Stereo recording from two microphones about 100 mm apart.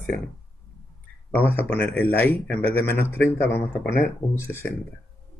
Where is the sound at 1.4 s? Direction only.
20° left (ahead or behind).